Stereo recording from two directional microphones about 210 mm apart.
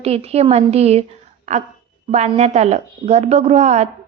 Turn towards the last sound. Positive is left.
turn(degrees=-30)  # may be behind; listen again after turning